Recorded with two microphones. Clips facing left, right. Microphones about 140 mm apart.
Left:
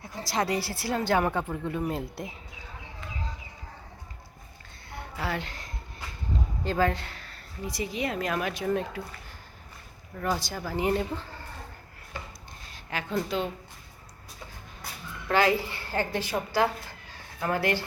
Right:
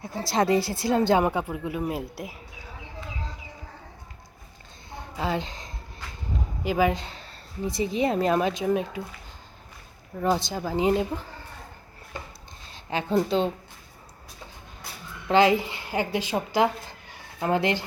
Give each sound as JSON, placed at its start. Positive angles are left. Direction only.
{"t": 0.0, "sound": "speech", "side_deg": -25}
{"t": 4.9, "sound": "a sound", "side_deg": -20}
{"t": 6.7, "sound": "speech", "side_deg": -10}
{"t": 10.2, "sound": "speech", "side_deg": -25}
{"t": 12.7, "sound": "a woman's voice", "side_deg": -25}
{"t": 15.3, "sound": "a woman's voice", "side_deg": -20}